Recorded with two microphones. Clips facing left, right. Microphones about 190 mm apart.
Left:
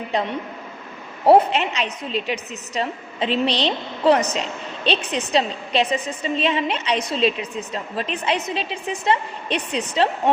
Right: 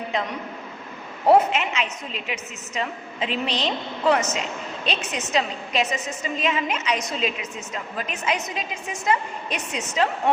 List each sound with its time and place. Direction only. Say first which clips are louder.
0.1 s a woman's voice: left 5 dB; 35° left (ahead or behind)